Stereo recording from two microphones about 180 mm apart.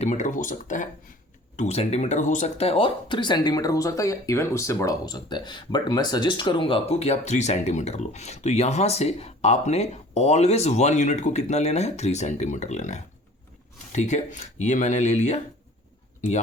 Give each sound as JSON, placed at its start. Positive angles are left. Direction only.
{"t": 0.0, "sound": "speech", "side_deg": 40}